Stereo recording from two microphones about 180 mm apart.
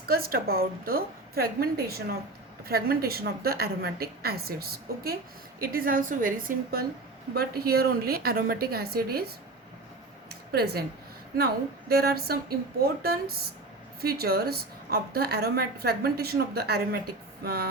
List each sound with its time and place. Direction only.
0.0 s a woman's voice: 55° right (ahead or behind)
10.5 s a woman's voice: 60° right (ahead or behind)